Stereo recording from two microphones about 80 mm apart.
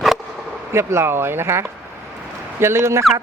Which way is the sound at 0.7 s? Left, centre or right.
Right.